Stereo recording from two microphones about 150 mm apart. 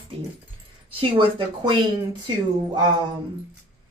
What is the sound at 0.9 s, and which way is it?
Speech, 35° right (ahead or behind).